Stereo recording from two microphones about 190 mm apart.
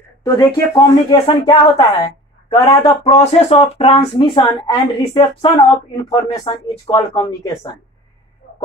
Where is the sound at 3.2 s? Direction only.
35° left (ahead or behind).